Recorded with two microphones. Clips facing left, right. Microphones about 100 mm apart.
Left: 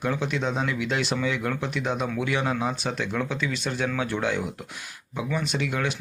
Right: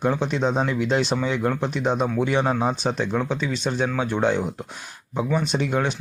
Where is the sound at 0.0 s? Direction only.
30° right (ahead or behind).